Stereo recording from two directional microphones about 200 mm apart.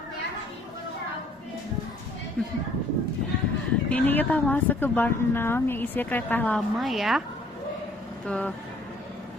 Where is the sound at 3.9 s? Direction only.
10° left (ahead or behind).